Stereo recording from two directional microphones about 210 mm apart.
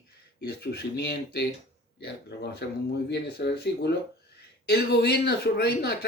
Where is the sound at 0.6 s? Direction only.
50° left (ahead or behind).